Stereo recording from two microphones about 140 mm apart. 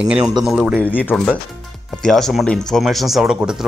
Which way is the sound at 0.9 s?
10° left (ahead or behind).